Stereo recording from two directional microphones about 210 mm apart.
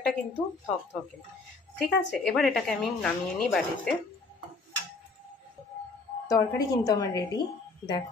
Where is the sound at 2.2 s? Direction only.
Centre (ahead or behind).